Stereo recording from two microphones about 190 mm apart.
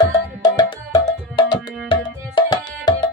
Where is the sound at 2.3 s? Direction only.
20° left (ahead or behind).